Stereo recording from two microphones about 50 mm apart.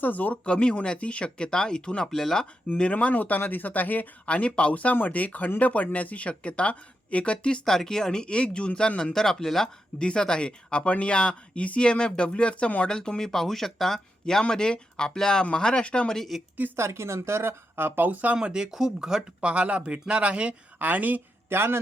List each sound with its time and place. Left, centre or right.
0.0 s speech: left
0.4 s speech: left
2.6 s speech: left
4.3 s speech: left
7.6 s speech: centre
9.1 s speech: centre
10.0 s speech: centre
13.0 s speech: centre
16.1 s speech: centre
16.7 s speech: right
18.3 s speech: centre
19.4 s speech: right
20.7 s a woman's voice: right
21.5 s a man's voice: right